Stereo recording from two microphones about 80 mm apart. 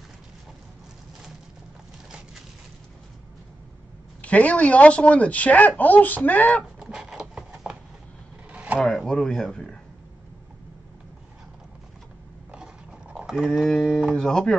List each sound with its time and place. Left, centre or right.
4.2 s a woman's voice: centre
6.8 s a sound: centre
8.7 s speech: centre
13.1 s speech: centre